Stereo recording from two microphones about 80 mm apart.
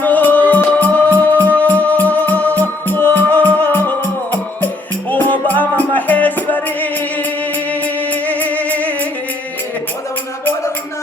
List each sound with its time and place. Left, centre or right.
0.0 s music: left
7.7 s music: centre